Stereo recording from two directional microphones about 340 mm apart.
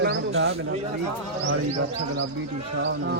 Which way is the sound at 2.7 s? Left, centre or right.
Right.